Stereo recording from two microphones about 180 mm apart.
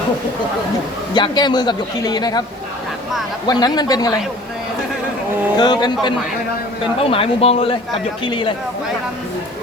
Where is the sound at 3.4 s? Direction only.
20° left (ahead or behind).